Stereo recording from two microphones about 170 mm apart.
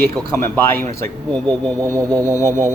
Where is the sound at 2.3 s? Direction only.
15° left (ahead or behind).